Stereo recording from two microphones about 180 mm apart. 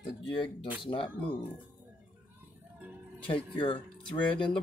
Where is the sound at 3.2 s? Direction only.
30° left (ahead or behind).